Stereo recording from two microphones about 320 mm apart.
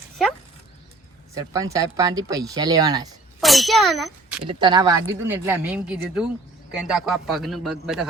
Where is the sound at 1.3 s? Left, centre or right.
Centre.